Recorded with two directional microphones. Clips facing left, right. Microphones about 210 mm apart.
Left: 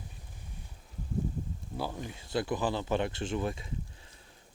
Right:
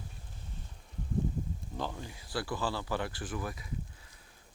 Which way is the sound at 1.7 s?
10° left (ahead or behind).